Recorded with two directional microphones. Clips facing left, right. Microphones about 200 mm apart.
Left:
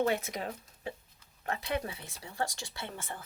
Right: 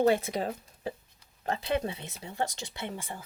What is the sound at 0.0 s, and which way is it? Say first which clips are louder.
Speech: right 5 dB; 30° right (ahead or behind).